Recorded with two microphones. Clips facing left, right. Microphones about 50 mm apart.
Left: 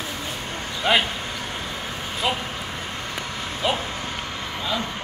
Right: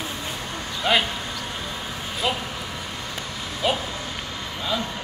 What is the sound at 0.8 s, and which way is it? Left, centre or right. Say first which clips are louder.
Speech: left 1 dB; centre.